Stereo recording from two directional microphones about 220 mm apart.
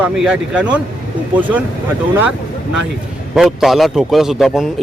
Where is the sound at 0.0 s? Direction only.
5° right (ahead or behind).